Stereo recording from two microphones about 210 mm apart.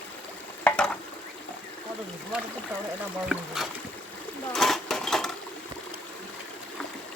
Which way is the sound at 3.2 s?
Centre (ahead or behind).